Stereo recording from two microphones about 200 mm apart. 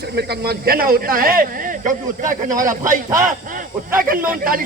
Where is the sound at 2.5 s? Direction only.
15° right (ahead or behind).